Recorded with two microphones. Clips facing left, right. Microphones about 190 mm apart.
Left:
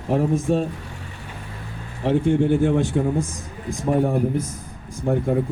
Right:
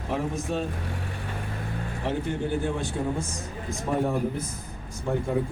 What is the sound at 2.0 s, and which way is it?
Speech, 25° left (ahead or behind).